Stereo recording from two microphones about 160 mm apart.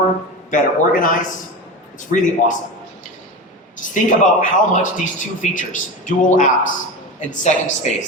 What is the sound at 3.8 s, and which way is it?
A man's voice, 55° left (ahead or behind).